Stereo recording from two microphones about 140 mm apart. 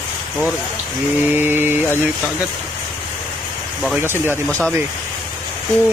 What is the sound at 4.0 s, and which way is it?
Speech, 15° right (ahead or behind).